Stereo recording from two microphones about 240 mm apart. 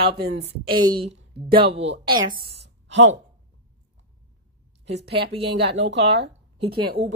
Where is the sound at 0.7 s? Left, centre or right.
Centre.